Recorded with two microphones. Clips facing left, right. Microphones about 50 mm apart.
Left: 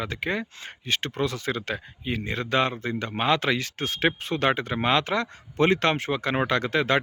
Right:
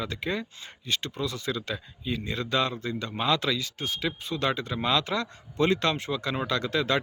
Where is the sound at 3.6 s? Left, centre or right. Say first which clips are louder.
Left 5 dB; left.